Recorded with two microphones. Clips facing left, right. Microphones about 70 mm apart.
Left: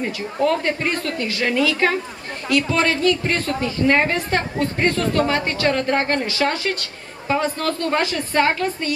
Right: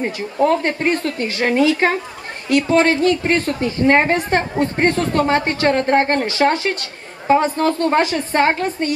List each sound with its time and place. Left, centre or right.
0.0 s a woman's voice: right